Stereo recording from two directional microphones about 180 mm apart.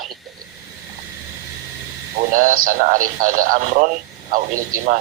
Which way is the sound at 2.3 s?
50° right (ahead or behind).